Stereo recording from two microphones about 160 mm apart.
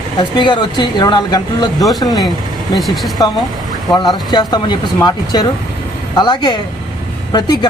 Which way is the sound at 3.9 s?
25° left (ahead or behind).